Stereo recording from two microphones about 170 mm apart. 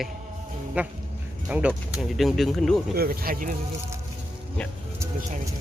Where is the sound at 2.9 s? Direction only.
60° right (ahead or behind).